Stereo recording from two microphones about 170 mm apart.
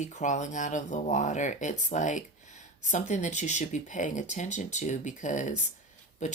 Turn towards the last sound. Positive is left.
turn(degrees=45)  # may be behind; listen again after turning